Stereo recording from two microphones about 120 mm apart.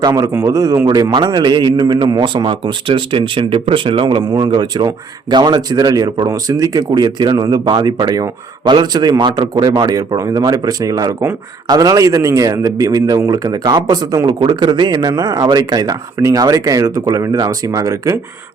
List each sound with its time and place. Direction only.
0.0 s a man's voice: 35° right (ahead or behind)